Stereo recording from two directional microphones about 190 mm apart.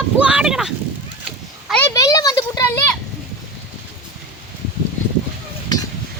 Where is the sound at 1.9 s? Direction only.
20° left (ahead or behind).